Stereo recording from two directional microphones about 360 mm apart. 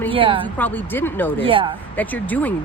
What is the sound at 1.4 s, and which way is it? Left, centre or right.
Speech, centre.